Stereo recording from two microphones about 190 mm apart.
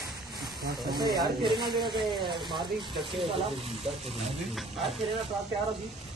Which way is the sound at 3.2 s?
30° right (ahead or behind).